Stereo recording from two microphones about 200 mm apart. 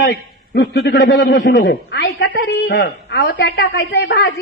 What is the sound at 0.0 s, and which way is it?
A man's voice, 55° left (ahead or behind).